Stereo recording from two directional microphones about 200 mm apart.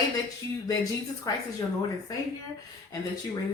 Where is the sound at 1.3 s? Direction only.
20° left (ahead or behind).